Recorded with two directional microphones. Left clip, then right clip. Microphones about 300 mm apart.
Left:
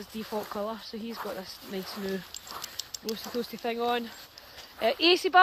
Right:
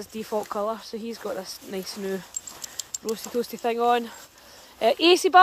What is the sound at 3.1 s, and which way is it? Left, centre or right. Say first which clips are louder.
Speech: right 6 dB; centre.